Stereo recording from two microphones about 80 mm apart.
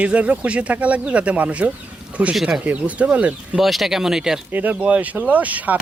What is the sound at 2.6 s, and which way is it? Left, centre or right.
Speech, centre.